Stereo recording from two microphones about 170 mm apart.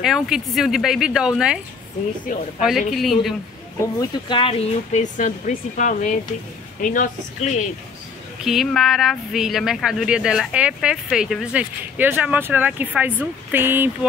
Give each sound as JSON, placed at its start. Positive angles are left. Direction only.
{"t": 0.0, "sound": "speech", "side_deg": -5}
{"t": 2.9, "sound": "speech", "side_deg": 0}
{"t": 3.8, "sound": "speech", "side_deg": 25}
{"t": 8.5, "sound": "speech", "side_deg": 0}